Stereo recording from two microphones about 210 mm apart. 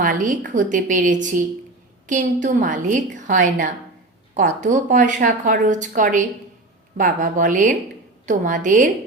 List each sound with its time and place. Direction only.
0.0 s speech: 40° right (ahead or behind)